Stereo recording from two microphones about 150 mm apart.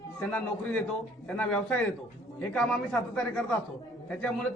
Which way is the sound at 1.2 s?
10° left (ahead or behind).